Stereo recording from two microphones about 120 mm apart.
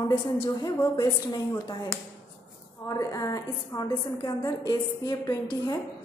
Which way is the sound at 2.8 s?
30° left (ahead or behind).